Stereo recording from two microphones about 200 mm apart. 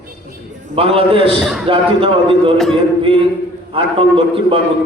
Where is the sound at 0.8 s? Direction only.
30° right (ahead or behind).